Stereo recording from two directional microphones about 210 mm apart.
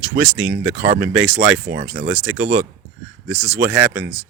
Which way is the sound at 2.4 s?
45° right (ahead or behind).